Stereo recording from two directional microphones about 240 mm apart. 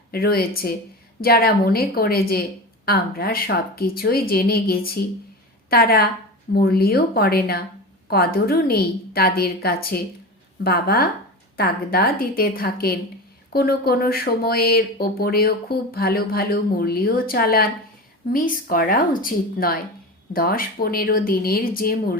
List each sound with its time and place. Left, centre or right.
0.1 s speech: left